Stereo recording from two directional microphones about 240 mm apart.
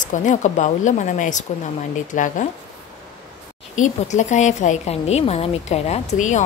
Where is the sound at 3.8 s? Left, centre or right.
Left.